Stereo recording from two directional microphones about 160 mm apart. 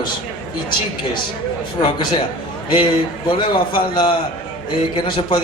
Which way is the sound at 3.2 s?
30° left (ahead or behind).